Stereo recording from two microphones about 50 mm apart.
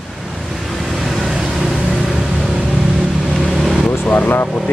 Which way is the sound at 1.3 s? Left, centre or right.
Centre.